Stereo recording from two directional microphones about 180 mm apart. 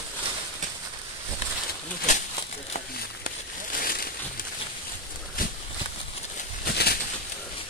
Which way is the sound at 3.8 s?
55° left (ahead or behind).